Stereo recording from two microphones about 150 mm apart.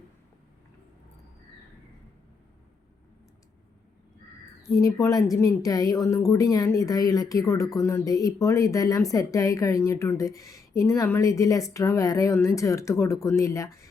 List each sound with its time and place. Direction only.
4.7 s speech: 20° left (ahead or behind)